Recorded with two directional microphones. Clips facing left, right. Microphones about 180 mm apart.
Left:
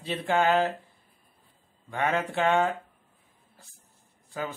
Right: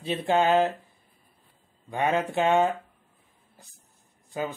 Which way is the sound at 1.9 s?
15° right (ahead or behind).